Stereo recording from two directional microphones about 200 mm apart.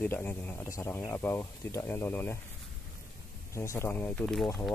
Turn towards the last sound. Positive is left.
turn(degrees=5)  # may be behind; listen again after turning